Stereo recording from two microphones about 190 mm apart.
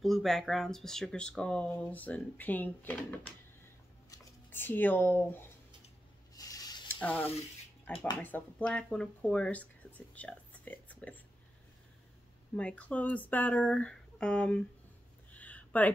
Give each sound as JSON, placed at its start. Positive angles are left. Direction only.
{"t": 0.0, "sound": "speech", "side_deg": 0}
{"t": 6.3, "sound": "spray", "side_deg": 20}
{"t": 7.0, "sound": "speech", "side_deg": 10}
{"t": 12.5, "sound": "speech", "side_deg": 5}
{"t": 15.3, "sound": "a sound", "side_deg": 5}